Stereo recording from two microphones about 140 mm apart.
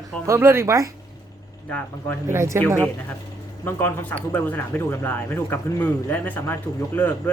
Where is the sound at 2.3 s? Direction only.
20° right (ahead or behind).